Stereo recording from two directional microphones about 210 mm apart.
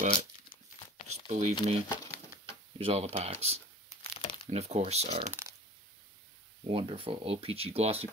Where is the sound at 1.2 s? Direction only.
35° right (ahead or behind).